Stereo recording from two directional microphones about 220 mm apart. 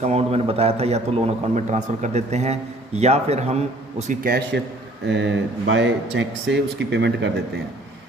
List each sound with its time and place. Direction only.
0.0 s a man's voice: 30° right (ahead or behind); by 7.3 s 50° right (ahead or behind)